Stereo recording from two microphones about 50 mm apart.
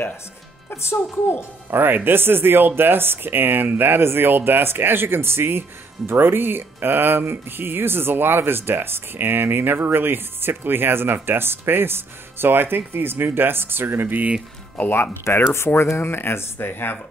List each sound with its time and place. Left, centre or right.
0.7 s speech: left
1.7 s speech: right
14.8 s speech: left
15.5 s speech: left